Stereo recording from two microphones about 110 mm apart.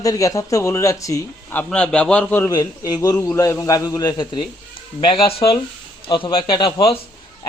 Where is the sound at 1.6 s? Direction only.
10° left (ahead or behind).